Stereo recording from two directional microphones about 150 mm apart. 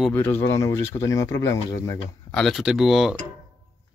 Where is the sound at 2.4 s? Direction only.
Centre (ahead or behind).